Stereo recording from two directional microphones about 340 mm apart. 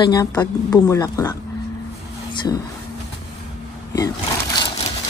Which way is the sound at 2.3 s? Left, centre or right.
Centre.